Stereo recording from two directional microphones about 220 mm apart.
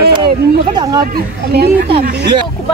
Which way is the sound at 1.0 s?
45° right (ahead or behind).